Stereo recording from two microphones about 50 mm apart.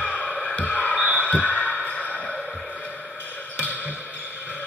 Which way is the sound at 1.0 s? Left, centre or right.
Right.